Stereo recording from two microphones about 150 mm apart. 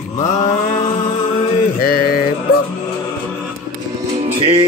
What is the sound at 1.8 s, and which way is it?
Mantra, 80° left.